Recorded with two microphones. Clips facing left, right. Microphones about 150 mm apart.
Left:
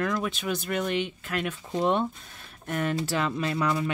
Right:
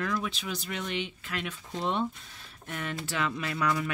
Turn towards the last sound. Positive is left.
turn(degrees=25)  # may be behind; listen again after turning